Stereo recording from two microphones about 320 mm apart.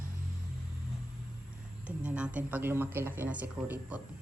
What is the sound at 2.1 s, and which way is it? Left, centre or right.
Speech, centre.